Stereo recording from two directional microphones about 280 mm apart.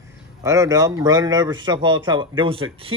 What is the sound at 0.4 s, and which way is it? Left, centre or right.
A man's voice, centre.